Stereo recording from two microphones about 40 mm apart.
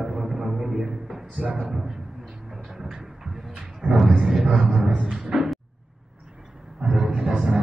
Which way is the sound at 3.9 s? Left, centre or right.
Centre.